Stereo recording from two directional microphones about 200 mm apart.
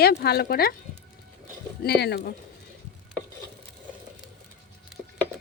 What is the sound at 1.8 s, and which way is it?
Speech, 55° left (ahead or behind).